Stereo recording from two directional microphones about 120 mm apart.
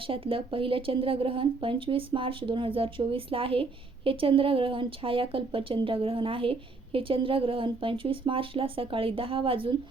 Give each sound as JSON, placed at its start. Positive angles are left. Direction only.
{"t": 0.1, "sound": "speech", "side_deg": -50}